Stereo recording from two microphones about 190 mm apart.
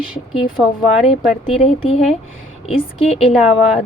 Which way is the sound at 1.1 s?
30° left (ahead or behind).